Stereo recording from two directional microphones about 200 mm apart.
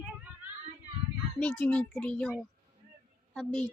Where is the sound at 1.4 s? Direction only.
5° left (ahead or behind).